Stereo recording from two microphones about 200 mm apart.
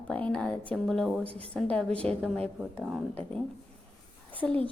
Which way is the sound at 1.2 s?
30° right (ahead or behind).